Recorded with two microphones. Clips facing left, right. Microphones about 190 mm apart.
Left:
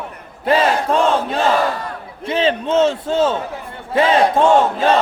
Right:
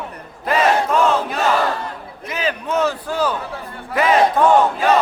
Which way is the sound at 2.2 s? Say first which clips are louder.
Left 6 dB; 30° left (ahead or behind).